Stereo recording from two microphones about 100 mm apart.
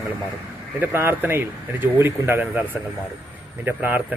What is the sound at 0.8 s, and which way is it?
Speech, 20° right (ahead or behind).